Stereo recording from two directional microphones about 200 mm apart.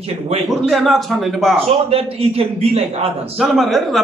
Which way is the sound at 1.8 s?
30° right (ahead or behind).